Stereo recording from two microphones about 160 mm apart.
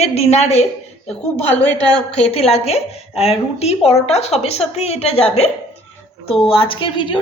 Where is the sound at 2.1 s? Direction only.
40° left (ahead or behind).